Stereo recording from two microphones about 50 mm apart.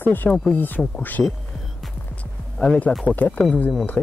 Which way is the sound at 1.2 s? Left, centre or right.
Centre.